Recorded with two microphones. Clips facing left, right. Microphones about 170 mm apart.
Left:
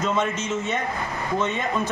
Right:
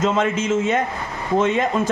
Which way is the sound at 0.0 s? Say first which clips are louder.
Right 5 dB; 90° right.